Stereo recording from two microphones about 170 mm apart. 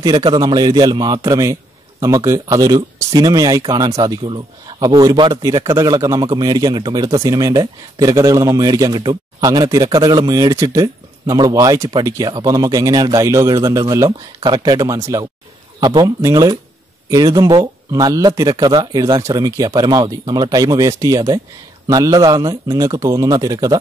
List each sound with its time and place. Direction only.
0.0 s a man's voice: 25° right (ahead or behind)